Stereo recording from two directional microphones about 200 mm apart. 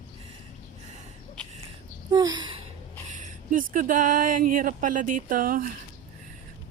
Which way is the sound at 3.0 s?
40° right (ahead or behind).